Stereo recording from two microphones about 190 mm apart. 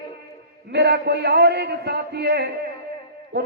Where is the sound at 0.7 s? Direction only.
60° right (ahead or behind).